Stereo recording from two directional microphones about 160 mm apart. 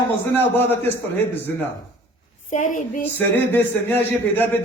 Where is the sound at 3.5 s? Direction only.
10° left (ahead or behind).